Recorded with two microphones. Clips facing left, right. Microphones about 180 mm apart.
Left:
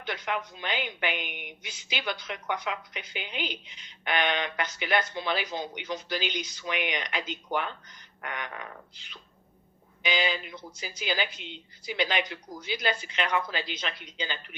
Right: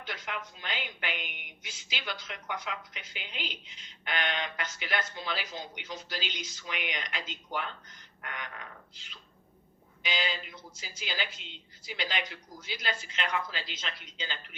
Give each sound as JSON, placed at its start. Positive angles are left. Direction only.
{"t": 0.0, "sound": "a woman's voice", "side_deg": 70}
{"t": 10.1, "sound": "a woman's voice", "side_deg": 65}